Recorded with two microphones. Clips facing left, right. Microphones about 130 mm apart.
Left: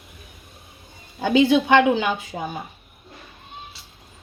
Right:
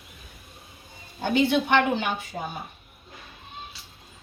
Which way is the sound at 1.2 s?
90° left.